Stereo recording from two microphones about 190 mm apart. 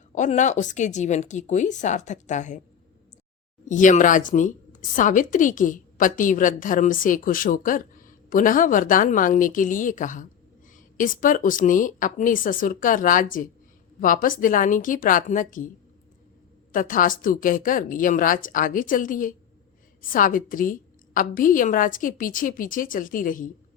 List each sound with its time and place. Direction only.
0.1 s speech: 40° left (ahead or behind)
3.7 s a woman's voice: 40° left (ahead or behind)
16.7 s a woman's voice: 45° left (ahead or behind)